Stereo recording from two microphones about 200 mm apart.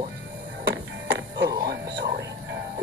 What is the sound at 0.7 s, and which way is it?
Music, 60° right (ahead or behind).